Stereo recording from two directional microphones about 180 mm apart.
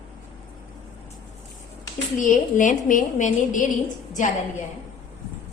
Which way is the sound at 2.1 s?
45° left (ahead or behind).